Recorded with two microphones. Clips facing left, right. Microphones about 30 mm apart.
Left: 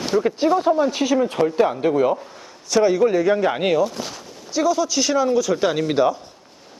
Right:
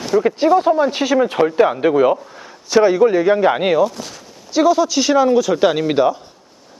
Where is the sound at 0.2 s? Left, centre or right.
Centre.